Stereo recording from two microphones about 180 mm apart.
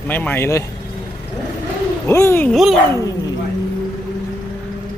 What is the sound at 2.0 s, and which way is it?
Speech, 15° left (ahead or behind).